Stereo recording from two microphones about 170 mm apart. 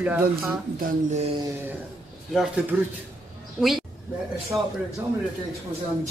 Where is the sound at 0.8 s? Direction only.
40° right (ahead or behind).